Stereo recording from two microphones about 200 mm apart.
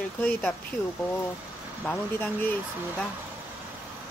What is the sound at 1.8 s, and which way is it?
Speech, 10° left (ahead or behind).